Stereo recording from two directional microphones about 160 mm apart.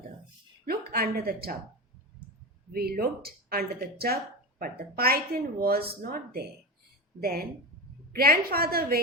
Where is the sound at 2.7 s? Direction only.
75° right (ahead or behind).